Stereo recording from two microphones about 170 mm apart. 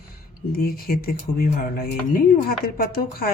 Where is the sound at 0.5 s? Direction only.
60° left (ahead or behind).